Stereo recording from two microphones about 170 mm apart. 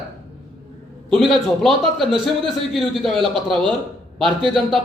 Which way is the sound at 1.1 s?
Centre (ahead or behind).